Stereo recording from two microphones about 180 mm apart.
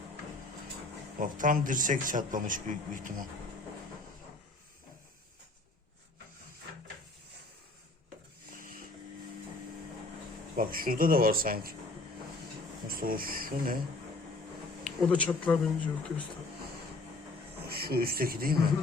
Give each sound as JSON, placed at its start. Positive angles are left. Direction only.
{"t": 1.2, "sound": "a man's voice", "side_deg": -50}
{"t": 8.5, "sound": "printer", "side_deg": -50}
{"t": 10.6, "sound": "a man's voice", "side_deg": -55}
{"t": 12.9, "sound": "a man's voice", "side_deg": -55}
{"t": 15.0, "sound": "speech", "side_deg": 5}
{"t": 17.6, "sound": "speech", "side_deg": -60}